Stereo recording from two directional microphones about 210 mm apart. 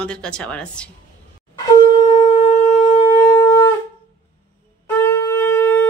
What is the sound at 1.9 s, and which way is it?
Shofar, 20° left (ahead or behind).